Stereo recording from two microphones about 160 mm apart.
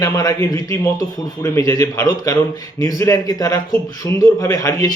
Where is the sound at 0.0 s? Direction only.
20° left (ahead or behind).